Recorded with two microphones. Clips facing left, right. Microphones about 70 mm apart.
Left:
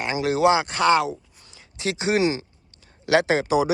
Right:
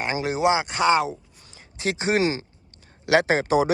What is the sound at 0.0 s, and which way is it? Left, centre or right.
Speech, right.